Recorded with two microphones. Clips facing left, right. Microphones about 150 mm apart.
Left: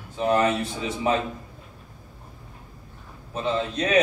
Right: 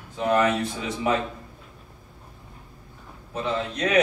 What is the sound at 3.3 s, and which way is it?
Speech, 25° left (ahead or behind).